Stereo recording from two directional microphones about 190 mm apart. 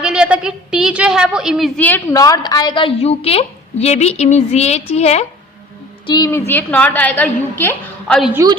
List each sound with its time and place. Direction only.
0.0 s a woman's voice: 5° right (ahead or behind); by 5.2 s 35° left (ahead or behind)
6.1 s a woman's voice: 20° left (ahead or behind)
8.3 s a woman's voice: 15° right (ahead or behind)